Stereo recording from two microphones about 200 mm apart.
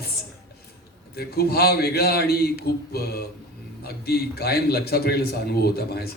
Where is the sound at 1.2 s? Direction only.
50° left (ahead or behind).